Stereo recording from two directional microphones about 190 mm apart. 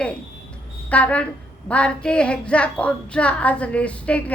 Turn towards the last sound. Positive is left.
turn(degrees=5)  # may be behind; listen again after turning